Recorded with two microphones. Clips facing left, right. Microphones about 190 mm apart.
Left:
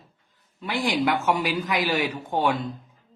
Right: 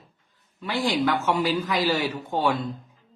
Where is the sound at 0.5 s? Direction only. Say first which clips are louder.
Even; 15° left (ahead or behind).